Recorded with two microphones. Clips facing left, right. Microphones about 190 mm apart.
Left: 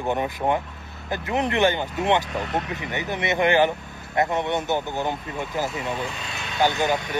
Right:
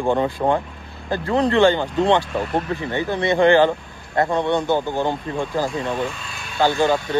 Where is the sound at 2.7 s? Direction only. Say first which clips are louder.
Right 6 dB; 20° left (ahead or behind).